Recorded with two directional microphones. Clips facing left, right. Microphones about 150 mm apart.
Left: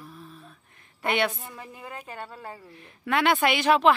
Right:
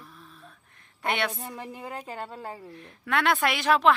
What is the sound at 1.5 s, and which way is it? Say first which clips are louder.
A woman's voice: right 4 dB; 25° right (ahead or behind).